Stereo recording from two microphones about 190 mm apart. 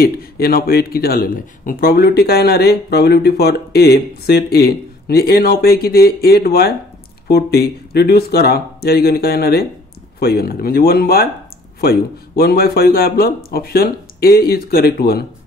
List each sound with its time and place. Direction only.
0.0 s a man's voice: 50° left (ahead or behind)